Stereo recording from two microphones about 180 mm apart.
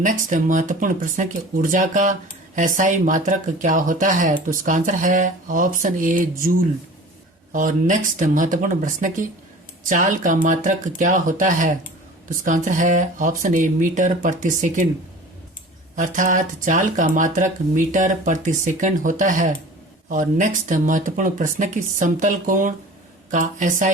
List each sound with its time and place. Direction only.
0.0 s speech: 45° right (ahead or behind)
16.0 s speech: 45° right (ahead or behind)